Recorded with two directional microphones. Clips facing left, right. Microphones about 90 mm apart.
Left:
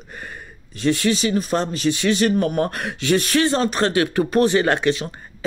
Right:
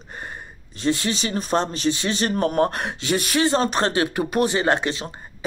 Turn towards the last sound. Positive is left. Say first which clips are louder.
# left 2 dB
turn(degrees=-25)  # may be behind; listen again after turning